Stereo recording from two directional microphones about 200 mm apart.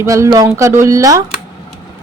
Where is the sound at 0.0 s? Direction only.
15° right (ahead or behind).